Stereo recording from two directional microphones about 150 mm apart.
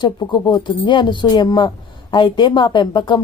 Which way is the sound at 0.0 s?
30° left (ahead or behind).